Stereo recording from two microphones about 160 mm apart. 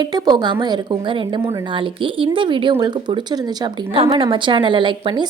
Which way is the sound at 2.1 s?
30° right (ahead or behind).